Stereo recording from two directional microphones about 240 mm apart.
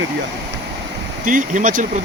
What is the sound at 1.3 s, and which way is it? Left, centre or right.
Speech, right.